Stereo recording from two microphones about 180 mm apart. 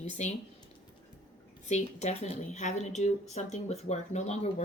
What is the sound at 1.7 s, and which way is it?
Speech, 40° left (ahead or behind).